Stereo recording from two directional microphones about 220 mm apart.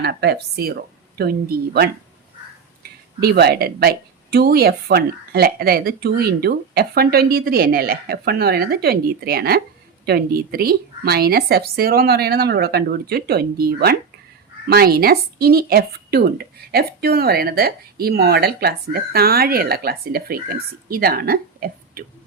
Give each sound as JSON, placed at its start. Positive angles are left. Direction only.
{"t": 0.0, "sound": "speech", "side_deg": -45}
{"t": 3.2, "sound": "speech", "side_deg": -45}